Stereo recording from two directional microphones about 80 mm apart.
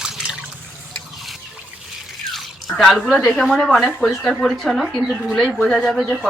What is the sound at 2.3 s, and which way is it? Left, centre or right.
Drip, centre.